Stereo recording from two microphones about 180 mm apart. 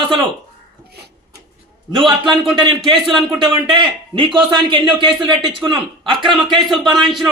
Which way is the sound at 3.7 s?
25° right (ahead or behind).